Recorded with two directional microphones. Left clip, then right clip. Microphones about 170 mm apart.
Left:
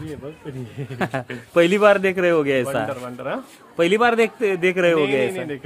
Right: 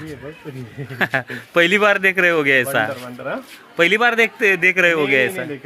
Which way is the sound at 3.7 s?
5° left (ahead or behind).